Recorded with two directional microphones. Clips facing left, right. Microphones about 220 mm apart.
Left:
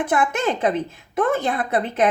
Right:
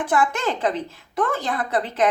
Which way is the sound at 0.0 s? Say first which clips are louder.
Left 1 dB; 20° left (ahead or behind).